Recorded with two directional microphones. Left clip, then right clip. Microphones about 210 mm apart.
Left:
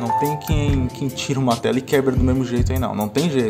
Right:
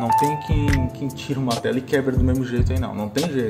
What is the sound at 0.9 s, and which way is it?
Speech, 25° left (ahead or behind).